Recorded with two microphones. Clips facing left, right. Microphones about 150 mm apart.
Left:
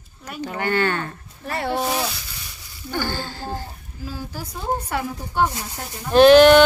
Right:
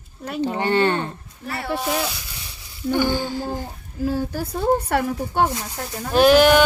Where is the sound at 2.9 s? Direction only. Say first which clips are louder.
Right 6 dB; 15° right (ahead or behind).